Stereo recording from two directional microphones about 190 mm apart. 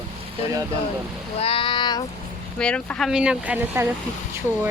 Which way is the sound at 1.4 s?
30° left (ahead or behind).